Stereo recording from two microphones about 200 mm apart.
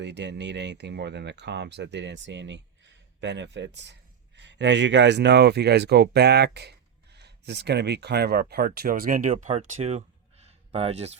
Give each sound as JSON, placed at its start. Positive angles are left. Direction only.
{"t": 0.0, "sound": "speech", "side_deg": -60}